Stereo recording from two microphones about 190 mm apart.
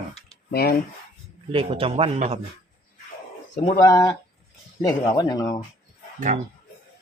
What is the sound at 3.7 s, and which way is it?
Speech, 20° left (ahead or behind).